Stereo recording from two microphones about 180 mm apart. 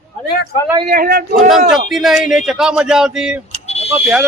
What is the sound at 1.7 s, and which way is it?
A man's voice, centre (ahead or behind).